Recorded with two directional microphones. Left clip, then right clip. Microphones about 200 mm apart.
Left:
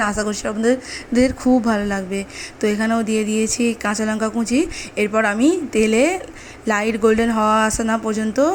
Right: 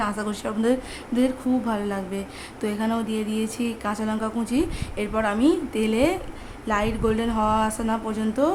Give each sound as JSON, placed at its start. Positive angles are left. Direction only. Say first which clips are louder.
{"t": 0.0, "sound": "a woman's voice", "louder": "left 6 dB", "side_deg": 15}